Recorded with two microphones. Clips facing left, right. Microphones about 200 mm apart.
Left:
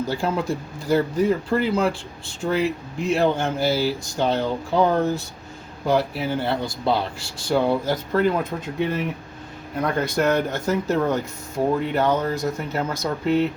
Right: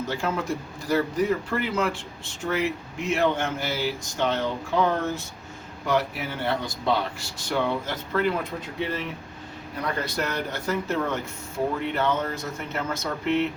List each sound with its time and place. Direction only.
0.0 s speech: 35° left (ahead or behind)
9.8 s speech: 50° left (ahead or behind)